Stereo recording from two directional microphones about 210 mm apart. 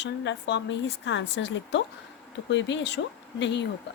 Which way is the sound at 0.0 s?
60° left (ahead or behind).